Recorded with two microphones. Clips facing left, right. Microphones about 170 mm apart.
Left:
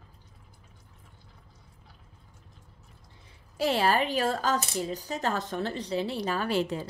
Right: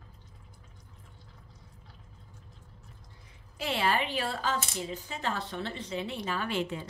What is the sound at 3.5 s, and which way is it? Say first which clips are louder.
Speech: left 5 dB; 40° left (ahead or behind).